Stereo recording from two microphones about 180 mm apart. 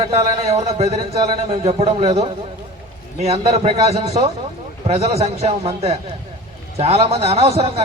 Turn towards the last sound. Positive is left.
turn(degrees=-35)  # may be behind; listen again after turning